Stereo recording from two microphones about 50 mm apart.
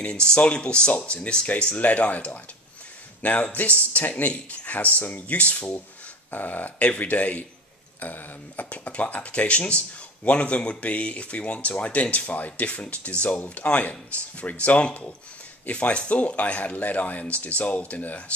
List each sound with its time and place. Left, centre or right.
0.1 s speech: centre
6.3 s speech: left